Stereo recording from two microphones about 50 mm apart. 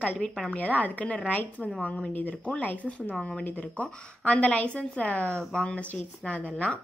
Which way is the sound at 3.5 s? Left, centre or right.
Left.